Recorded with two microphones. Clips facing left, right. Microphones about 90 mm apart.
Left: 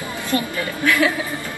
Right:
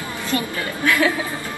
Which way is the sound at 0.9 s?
20° right (ahead or behind).